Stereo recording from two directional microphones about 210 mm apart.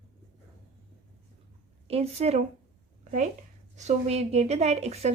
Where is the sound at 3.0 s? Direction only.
35° right (ahead or behind).